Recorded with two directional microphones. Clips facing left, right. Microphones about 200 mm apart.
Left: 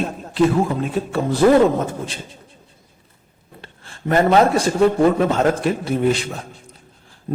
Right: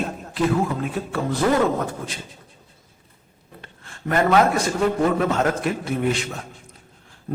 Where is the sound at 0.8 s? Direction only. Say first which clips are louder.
Left 4 dB; 25° left (ahead or behind).